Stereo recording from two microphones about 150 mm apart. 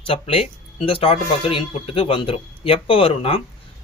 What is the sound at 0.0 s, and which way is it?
Speech, 35° left (ahead or behind).